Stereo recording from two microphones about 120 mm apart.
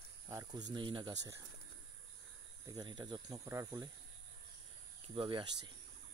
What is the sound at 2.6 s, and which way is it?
Speech, 30° right (ahead or behind).